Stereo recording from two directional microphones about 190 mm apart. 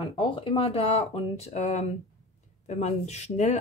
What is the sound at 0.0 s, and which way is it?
Speech, 25° left (ahead or behind).